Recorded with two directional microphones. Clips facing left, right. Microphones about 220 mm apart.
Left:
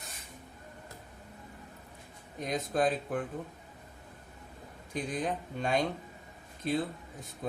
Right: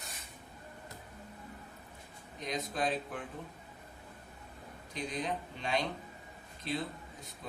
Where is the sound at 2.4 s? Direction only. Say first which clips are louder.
Left 6 dB; 50° left (ahead or behind).